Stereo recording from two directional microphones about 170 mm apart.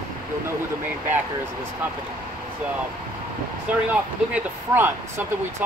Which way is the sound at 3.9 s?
10° right (ahead or behind).